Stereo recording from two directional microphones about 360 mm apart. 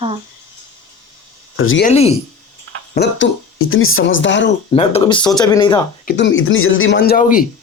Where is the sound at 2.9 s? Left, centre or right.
Left.